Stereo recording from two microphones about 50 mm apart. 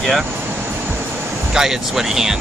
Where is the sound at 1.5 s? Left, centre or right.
Centre.